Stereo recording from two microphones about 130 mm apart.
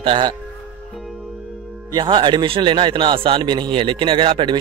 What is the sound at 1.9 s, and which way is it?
A man's voice, 35° right (ahead or behind).